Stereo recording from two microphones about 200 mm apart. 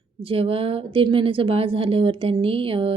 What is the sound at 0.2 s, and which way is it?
Speech, 25° right (ahead or behind).